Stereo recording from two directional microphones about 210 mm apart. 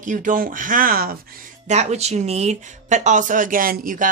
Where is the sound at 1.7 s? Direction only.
30° right (ahead or behind).